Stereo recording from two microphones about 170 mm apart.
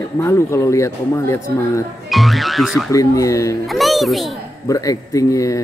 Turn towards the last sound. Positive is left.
turn(degrees=20)  # may be behind; listen again after turning